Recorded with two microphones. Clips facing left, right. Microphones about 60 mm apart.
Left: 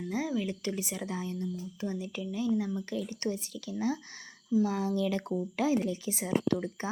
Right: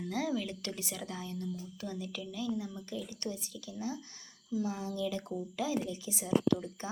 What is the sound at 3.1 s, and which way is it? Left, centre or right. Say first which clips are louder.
Speech: left 6 dB; left.